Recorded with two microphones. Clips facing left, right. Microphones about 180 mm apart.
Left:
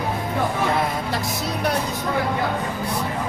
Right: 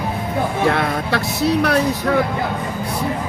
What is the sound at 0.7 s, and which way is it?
Speech, 70° right (ahead or behind).